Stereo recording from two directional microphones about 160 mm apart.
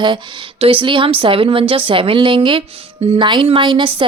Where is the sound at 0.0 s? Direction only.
30° right (ahead or behind).